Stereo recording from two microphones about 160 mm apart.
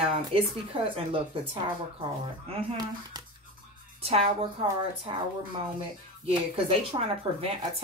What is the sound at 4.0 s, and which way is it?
A woman's voice, 40° right (ahead or behind).